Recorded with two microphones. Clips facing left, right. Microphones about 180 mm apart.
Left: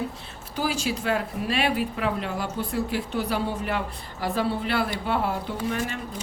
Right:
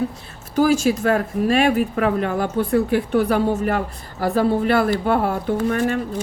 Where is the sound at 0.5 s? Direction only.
45° right (ahead or behind).